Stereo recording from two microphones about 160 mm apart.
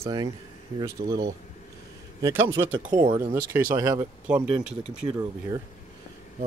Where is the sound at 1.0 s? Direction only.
90° right.